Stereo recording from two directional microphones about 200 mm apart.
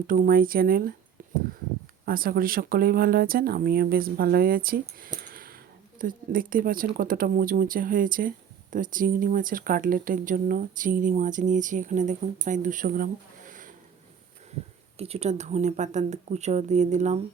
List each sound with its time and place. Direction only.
0.1 s speech: 45° right (ahead or behind)
1.2 s a sound: 40° right (ahead or behind)
2.0 s speech: 45° right (ahead or behind)
5.3 s a sound: 45° right (ahead or behind)
6.0 s speech: 45° right (ahead or behind)
14.9 s speech: 30° right (ahead or behind)